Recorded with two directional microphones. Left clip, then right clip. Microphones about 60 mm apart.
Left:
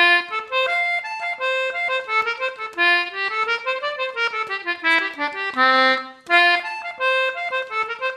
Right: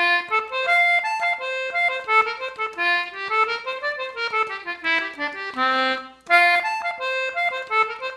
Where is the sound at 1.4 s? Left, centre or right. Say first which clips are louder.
Left 1 dB; left.